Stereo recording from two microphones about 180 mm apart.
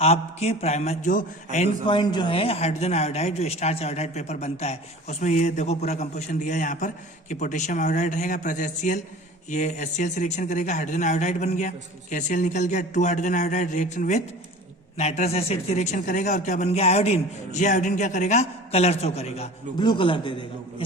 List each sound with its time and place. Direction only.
0.0 s a man's voice: 35° left (ahead or behind)
1.9 s a man's voice: 25° left (ahead or behind)
19.8 s a man's voice: 25° left (ahead or behind)